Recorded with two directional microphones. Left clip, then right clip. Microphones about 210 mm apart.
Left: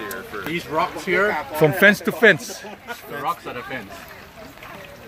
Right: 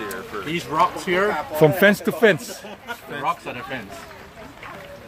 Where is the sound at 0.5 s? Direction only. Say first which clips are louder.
Right 3 dB; 40° right (ahead or behind).